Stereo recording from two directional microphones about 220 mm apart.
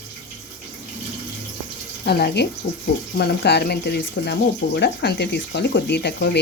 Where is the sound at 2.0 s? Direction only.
45° left (ahead or behind).